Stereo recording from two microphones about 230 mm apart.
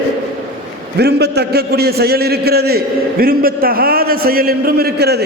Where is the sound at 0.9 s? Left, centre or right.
Right.